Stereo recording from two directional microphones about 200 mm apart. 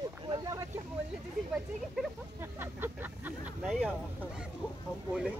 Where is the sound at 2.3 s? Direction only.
10° right (ahead or behind).